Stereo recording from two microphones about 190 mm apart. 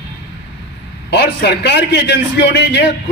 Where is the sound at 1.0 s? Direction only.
60° left (ahead or behind).